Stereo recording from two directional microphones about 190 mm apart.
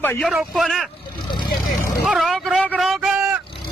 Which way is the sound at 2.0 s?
Centre (ahead or behind).